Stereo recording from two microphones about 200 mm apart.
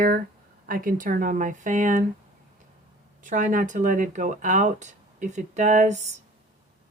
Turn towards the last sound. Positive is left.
turn(degrees=-35)  # may be behind; listen again after turning